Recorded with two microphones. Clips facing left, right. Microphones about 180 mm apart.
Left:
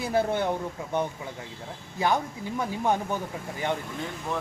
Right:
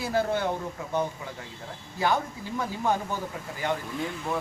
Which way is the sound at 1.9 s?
15° left (ahead or behind).